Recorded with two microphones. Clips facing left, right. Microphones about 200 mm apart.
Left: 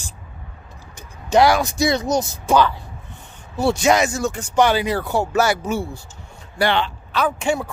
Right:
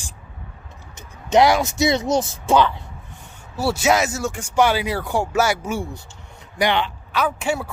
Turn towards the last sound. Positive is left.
turn(degrees=-5)  # may be behind; listen again after turning